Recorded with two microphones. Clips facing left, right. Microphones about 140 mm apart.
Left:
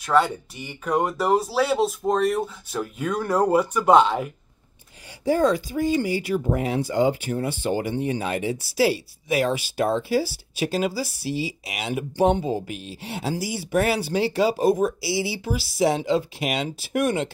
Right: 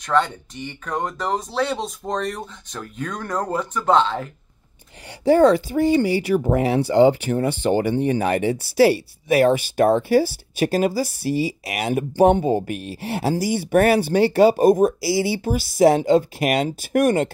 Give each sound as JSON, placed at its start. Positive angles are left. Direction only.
{"t": 0.0, "sound": "speech", "side_deg": 5}
{"t": 5.2, "sound": "speech", "side_deg": -70}